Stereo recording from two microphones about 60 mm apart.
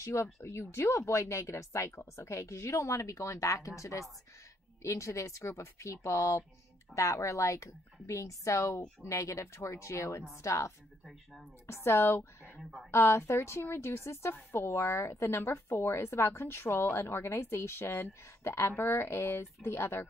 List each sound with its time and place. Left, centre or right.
0.0 s a woman's voice: left